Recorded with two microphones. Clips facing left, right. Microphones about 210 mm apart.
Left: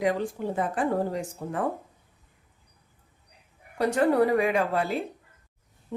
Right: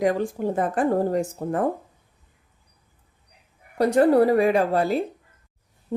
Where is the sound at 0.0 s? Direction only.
45° right (ahead or behind).